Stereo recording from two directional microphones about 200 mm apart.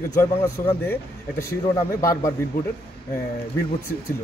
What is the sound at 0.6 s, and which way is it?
Speech, 15° left (ahead or behind).